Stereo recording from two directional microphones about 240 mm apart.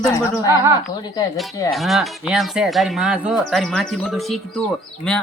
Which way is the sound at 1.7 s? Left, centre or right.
Centre.